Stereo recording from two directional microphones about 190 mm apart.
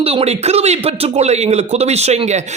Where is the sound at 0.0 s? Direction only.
30° right (ahead or behind).